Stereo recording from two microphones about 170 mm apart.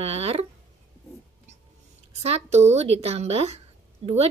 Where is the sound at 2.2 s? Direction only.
40° right (ahead or behind).